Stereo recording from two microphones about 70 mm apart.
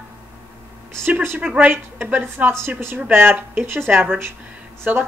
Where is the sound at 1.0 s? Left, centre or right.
Right.